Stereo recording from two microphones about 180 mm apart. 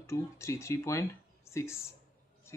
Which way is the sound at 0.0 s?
15° left (ahead or behind).